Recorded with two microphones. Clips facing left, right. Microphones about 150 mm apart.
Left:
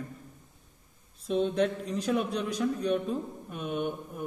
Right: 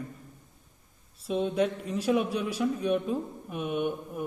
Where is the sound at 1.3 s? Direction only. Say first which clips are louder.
Even; 5° right (ahead or behind).